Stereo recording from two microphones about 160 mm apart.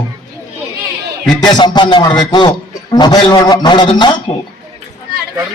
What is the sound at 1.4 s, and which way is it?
A man's voice, 25° left (ahead or behind).